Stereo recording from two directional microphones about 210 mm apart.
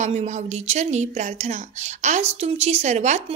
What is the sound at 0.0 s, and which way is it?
Speech, 35° right (ahead or behind).